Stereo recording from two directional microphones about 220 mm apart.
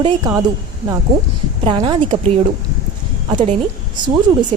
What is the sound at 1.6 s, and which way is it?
Speech, 20° right (ahead or behind).